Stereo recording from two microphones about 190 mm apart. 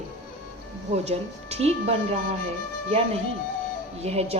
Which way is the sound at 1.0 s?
35° right (ahead or behind).